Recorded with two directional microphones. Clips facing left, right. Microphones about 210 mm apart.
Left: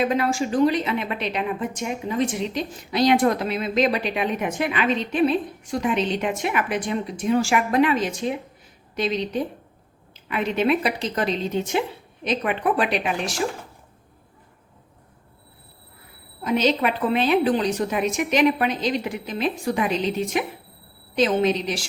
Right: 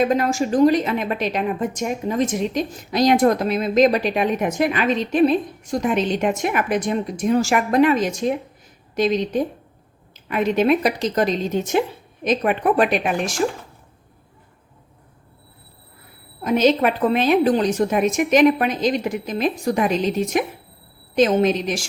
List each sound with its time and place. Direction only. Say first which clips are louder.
0.0 s a woman's voice: right 3 dB; 45° right (ahead or behind)
16.4 s a woman's voice: right 4 dB; 45° right (ahead or behind)